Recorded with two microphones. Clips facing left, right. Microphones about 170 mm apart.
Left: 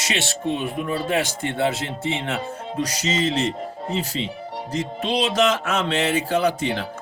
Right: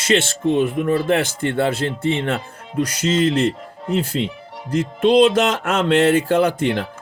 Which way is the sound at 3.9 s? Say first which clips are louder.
Right 7 dB; 55° right (ahead or behind).